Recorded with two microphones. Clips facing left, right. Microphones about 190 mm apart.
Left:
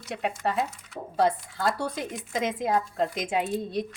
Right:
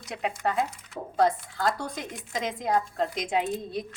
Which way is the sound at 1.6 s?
5° left (ahead or behind).